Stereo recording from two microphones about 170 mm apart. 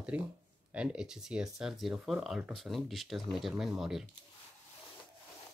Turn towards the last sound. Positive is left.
turn(degrees=0)  # may be behind; listen again after turning